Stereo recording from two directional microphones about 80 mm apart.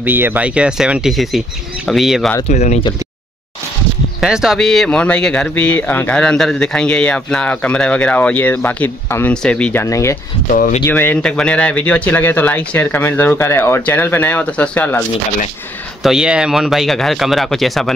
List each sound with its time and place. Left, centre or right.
0.0 s speech: right; by 2.2 s centre
4.2 s speech: centre
4.6 s speech: centre; by 6.1 s left
6.1 s speech: centre
9.8 s speech: left
10.9 s speech: left
11.2 s speech: centre
16.0 s speech: centre